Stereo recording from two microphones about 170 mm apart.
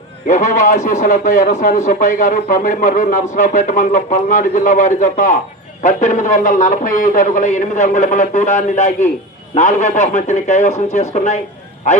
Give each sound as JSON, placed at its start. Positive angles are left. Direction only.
{"t": 0.3, "sound": "a man's voice", "side_deg": 50}